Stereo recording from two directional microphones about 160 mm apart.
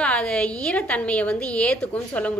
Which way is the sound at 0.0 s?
5° left (ahead or behind).